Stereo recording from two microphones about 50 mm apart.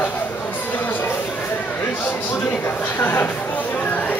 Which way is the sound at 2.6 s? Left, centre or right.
Left.